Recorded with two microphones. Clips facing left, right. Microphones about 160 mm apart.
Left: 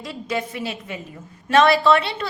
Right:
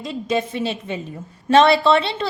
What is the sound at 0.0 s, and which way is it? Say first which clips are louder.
A woman's voice: right 4 dB; 20° right (ahead or behind).